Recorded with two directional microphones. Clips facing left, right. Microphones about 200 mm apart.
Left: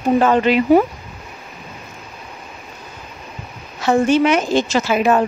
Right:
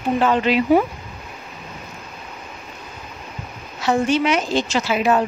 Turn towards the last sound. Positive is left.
turn(degrees=50)  # may be behind; listen again after turning